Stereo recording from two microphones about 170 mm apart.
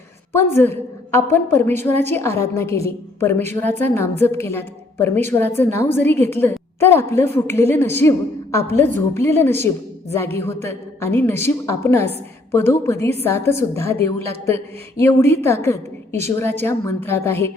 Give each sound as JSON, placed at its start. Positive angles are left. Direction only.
{"t": 0.3, "sound": "a woman's voice", "side_deg": 15}